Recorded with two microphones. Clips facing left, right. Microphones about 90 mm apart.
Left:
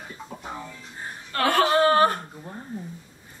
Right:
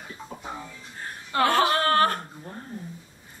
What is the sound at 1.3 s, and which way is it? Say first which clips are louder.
Speech: right 2 dB; 15° right (ahead or behind).